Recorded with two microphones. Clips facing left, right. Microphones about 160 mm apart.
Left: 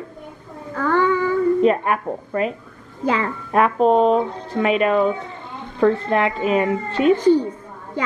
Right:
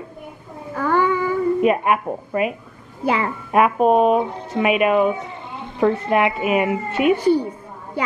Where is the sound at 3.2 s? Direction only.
15° right (ahead or behind).